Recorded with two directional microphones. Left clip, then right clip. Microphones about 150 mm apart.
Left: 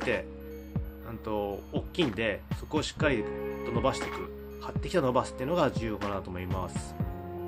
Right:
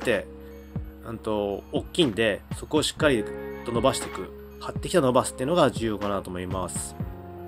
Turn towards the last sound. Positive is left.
turn(degrees=-25)  # may be behind; listen again after turning